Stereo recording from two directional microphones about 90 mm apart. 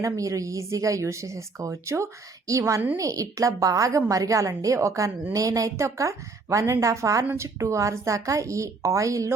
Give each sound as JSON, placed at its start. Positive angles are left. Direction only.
{"t": 0.0, "sound": "a woman's voice", "side_deg": -40}